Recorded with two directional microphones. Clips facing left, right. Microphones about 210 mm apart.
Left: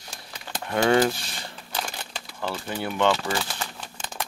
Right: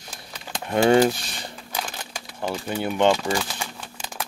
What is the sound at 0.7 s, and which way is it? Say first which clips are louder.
Speech: right 3 dB; 25° right (ahead or behind).